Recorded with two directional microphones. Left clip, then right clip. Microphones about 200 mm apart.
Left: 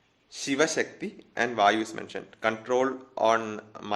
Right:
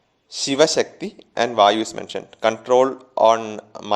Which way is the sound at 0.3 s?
25° right (ahead or behind).